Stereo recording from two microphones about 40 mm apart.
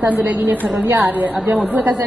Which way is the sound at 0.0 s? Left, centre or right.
Right.